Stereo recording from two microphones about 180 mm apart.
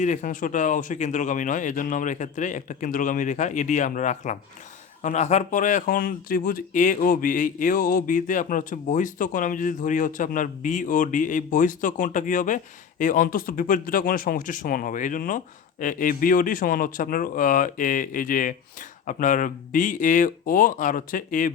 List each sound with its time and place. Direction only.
0.0 s speech: 45° left (ahead or behind)